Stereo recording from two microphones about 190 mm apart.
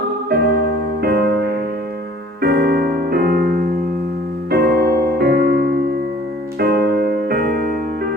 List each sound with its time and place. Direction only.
1.0 s music: 55° right (ahead or behind)
2.4 s music: 55° right (ahead or behind)
4.5 s music: 55° right (ahead or behind)
6.6 s keyboard: 55° right (ahead or behind)